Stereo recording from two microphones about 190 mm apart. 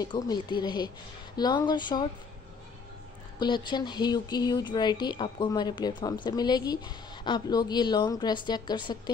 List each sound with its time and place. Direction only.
0.0 s speech: 20° left (ahead or behind)
3.3 s speech: 25° left (ahead or behind)